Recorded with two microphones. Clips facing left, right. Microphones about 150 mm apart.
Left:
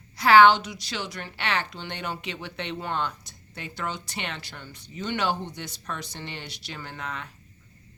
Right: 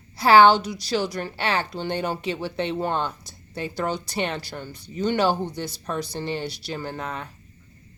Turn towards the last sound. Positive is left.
turn(degrees=-35)  # may be behind; listen again after turning